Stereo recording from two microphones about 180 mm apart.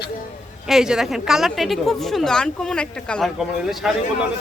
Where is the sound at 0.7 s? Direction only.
5° right (ahead or behind).